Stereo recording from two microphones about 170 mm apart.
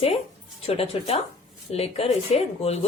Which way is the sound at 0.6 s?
35° left (ahead or behind).